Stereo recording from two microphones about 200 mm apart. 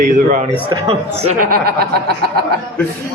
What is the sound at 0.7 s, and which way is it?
Speech, 30° right (ahead or behind).